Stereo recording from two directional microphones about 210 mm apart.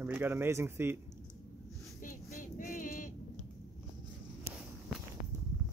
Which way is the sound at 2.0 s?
40° left (ahead or behind).